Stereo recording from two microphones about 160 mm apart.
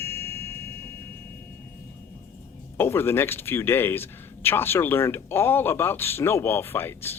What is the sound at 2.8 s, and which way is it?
Speech, 15° left (ahead or behind).